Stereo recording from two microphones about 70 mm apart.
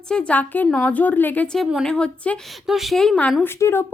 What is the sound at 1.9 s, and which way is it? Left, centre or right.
Speech, centre.